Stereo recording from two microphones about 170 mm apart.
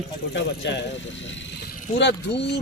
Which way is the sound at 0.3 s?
90° left.